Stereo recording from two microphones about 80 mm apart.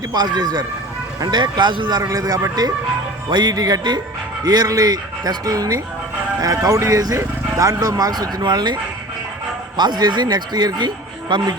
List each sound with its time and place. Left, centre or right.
0.1 s speech: right
2.0 s speech: right
3.2 s speech: right